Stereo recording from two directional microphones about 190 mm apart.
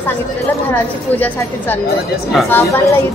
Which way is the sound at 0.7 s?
10° left (ahead or behind).